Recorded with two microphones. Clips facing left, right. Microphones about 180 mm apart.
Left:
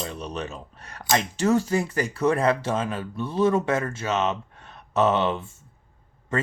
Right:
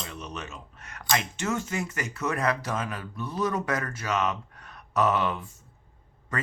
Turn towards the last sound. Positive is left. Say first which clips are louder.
# left 6 dB
turn(degrees=25)  # may be behind; listen again after turning